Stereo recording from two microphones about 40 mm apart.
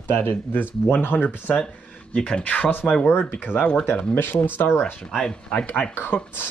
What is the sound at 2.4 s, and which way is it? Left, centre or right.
Speech, left.